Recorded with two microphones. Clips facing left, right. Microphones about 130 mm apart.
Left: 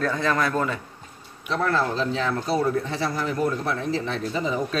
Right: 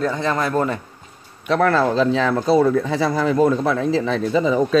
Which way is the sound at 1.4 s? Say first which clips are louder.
Right 7 dB; 85° right.